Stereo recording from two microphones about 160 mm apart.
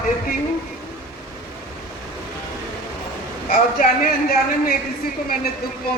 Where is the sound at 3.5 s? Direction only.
65° left (ahead or behind).